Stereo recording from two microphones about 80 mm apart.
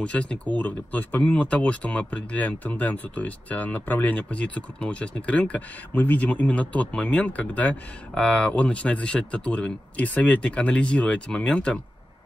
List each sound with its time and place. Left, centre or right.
0.0 s speech: centre